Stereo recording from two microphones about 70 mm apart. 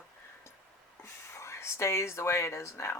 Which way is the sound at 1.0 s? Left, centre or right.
Left.